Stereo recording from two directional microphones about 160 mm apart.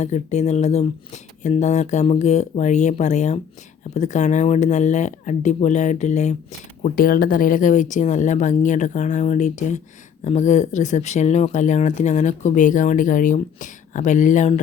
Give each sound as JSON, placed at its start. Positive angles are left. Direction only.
{"t": 0.0, "sound": "speech", "side_deg": 45}
{"t": 6.8, "sound": "speech", "side_deg": 60}